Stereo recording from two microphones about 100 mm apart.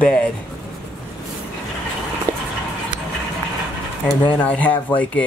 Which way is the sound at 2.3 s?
35° right (ahead or behind).